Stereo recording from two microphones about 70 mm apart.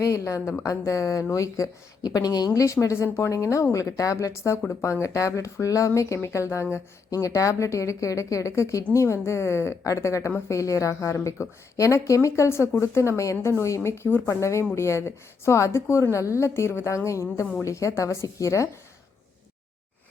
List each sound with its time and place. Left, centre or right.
0.0 s a woman's voice: left
2.0 s a woman's voice: left
2.5 s a woman's voice: left